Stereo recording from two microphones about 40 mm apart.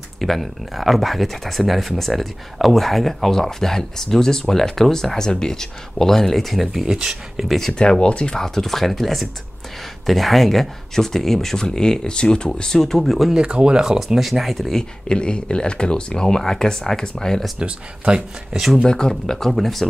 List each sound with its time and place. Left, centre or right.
0.2 s speech: centre
7.4 s speech: centre
7.7 s speech: left
8.4 s speech: centre
13.0 s speech: centre
13.4 s speech: right
13.8 s speech: centre
14.8 s speech: left
17.6 s speech: right
18.9 s speech: centre